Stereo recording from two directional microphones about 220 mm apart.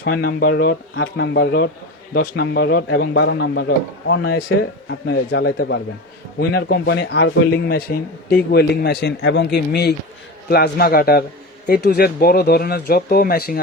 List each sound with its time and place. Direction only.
0.0 s a man's voice: 50° left (ahead or behind)